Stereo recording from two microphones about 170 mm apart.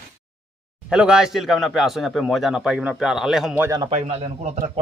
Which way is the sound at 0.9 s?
5° right (ahead or behind).